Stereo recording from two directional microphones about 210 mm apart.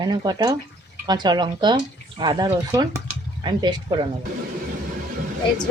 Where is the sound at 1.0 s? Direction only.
20° right (ahead or behind).